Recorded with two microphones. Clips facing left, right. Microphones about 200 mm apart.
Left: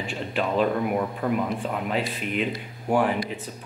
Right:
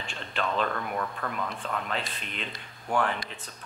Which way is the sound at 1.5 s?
10° left (ahead or behind).